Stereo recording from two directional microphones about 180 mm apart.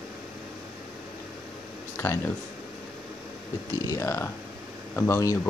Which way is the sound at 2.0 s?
15° left (ahead or behind).